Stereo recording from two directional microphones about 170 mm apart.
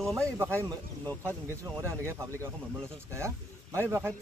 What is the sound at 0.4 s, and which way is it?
Speech, 15° right (ahead or behind).